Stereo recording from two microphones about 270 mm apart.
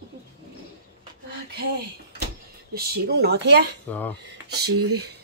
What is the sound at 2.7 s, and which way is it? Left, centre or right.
Speech, right.